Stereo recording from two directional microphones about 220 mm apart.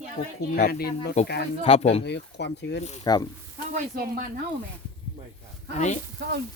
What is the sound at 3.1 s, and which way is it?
Speech, 20° left (ahead or behind).